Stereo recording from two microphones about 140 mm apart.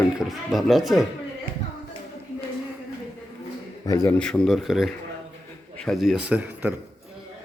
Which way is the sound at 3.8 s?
25° left (ahead or behind).